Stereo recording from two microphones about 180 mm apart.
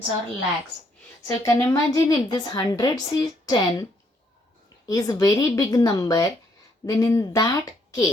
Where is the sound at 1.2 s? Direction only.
15° left (ahead or behind).